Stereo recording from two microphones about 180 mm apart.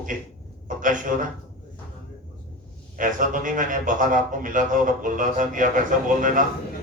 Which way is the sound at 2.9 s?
50° right (ahead or behind).